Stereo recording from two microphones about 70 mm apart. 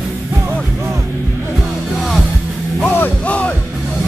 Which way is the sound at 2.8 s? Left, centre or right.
Left.